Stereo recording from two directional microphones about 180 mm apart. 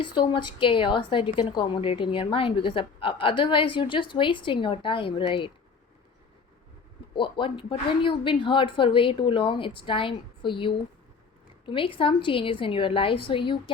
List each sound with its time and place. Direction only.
0.0 s a woman's voice: 25° left (ahead or behind)
7.1 s a woman's voice: 30° left (ahead or behind)